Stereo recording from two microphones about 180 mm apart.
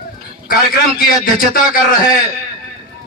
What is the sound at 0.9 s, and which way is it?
Music, 50° left (ahead or behind).